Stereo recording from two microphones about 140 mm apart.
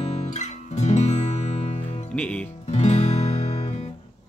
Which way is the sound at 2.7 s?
55° left (ahead or behind).